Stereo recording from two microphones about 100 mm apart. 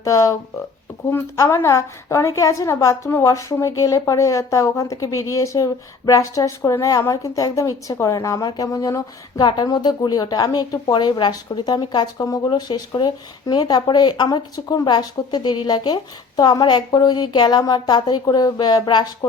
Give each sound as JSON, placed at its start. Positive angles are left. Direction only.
{"t": 0.0, "sound": "a woman's voice", "side_deg": 35}
{"t": 9.4, "sound": "speech", "side_deg": 50}
{"t": 12.1, "sound": "speech", "side_deg": 35}